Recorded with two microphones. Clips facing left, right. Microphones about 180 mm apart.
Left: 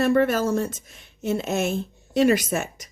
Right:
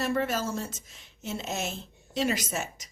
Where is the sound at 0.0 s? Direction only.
60° left (ahead or behind).